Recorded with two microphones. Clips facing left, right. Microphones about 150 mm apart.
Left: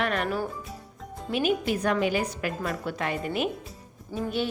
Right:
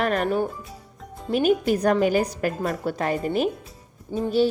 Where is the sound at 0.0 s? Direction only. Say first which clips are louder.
Right 4 dB; 40° right (ahead or behind).